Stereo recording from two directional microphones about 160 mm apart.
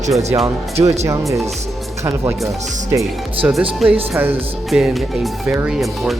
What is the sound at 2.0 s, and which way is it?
Speech, 15° right (ahead or behind).